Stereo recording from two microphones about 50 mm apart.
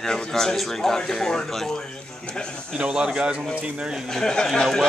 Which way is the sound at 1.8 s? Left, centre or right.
Centre.